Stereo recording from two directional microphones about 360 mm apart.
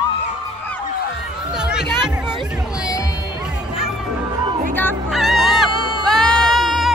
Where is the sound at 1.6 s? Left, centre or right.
Centre.